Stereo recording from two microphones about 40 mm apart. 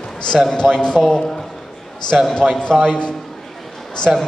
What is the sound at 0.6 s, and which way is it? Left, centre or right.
Speech, centre.